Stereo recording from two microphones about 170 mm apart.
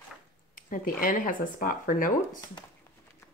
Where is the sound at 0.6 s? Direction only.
55° left (ahead or behind).